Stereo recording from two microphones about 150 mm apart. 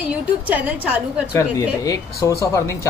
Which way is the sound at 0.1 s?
10° right (ahead or behind).